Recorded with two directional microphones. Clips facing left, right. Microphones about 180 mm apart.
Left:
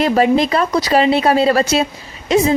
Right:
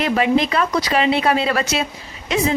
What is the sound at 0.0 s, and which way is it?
Speech, 40° left (ahead or behind).